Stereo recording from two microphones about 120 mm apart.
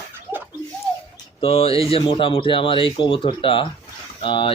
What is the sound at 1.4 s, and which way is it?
Speech, 55° left (ahead or behind).